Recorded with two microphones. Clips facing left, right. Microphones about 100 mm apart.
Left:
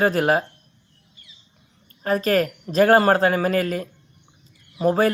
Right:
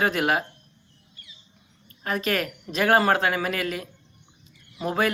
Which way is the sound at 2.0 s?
35° left (ahead or behind).